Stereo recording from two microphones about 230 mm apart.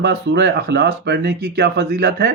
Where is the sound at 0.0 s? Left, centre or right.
Right.